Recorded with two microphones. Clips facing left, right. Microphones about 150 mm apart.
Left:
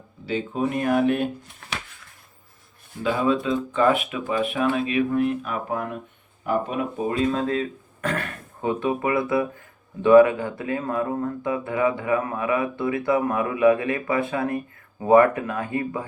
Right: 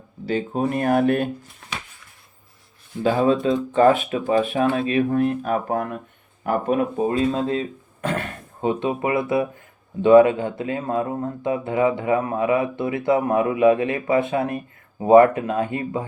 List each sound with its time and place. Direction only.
0.3 s speech: 40° right (ahead or behind)
3.0 s speech: 40° right (ahead or behind)
7.1 s speech: 30° right (ahead or behind)